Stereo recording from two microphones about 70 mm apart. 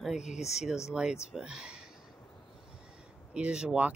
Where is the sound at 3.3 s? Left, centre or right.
Centre.